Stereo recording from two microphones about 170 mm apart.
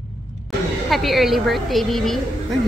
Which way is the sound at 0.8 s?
Centre (ahead or behind).